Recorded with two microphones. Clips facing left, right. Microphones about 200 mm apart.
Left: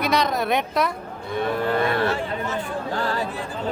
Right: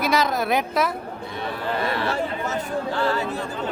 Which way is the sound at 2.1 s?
40° right (ahead or behind).